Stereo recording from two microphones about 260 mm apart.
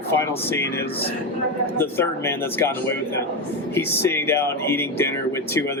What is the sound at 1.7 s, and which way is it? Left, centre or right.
Speech, centre.